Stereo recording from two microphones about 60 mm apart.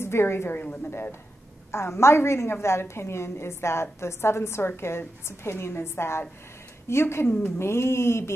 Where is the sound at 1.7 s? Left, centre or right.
Left.